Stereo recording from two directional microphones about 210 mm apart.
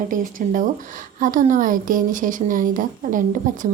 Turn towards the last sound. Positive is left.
turn(degrees=-40)  # may be behind; listen again after turning